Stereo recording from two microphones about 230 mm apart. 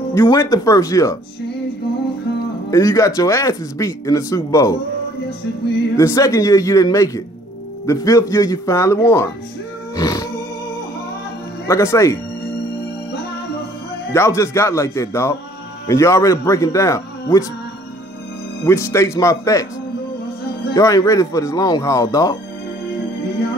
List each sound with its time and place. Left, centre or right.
0.1 s speech: centre
2.7 s speech: centre
5.9 s speech: centre
9.9 s music: centre
11.6 s speech: centre
14.1 s speech: centre
18.6 s speech: centre
20.7 s speech: centre